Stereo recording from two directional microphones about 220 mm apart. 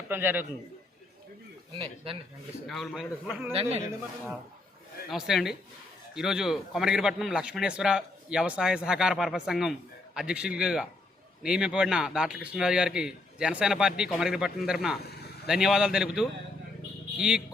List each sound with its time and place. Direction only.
0.1 s a man's voice: 10° right (ahead or behind)
2.0 s a man's voice: 25° right (ahead or behind)
2.6 s a man's voice: centre (ahead or behind)
3.5 s a man's voice: 25° right (ahead or behind)
5.0 s a man's voice: centre (ahead or behind)